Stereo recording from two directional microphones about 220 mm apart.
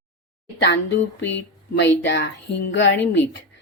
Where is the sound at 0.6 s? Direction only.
55° left (ahead or behind).